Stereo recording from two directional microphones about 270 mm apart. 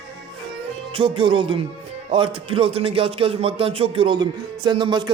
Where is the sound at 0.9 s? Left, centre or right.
Centre.